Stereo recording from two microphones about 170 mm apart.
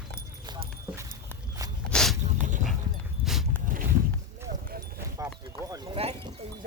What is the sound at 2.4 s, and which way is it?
Dog, 45° right (ahead or behind).